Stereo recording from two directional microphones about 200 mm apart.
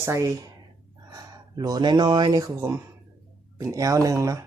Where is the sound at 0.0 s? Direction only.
15° right (ahead or behind).